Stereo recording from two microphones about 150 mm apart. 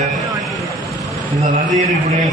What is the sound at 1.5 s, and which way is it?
Speech, 50° right (ahead or behind).